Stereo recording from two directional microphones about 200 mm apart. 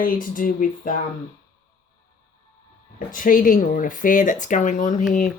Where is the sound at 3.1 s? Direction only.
40° left (ahead or behind).